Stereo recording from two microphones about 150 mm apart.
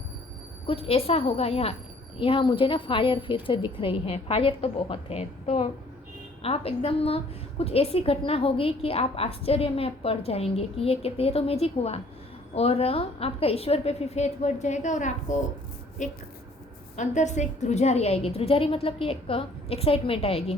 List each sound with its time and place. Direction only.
0.7 s a woman's voice: 40° left (ahead or behind)